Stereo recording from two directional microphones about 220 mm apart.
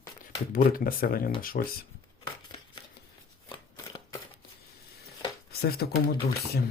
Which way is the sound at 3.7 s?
15° left (ahead or behind).